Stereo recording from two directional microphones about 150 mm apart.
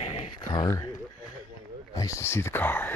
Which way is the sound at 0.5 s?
25° left (ahead or behind).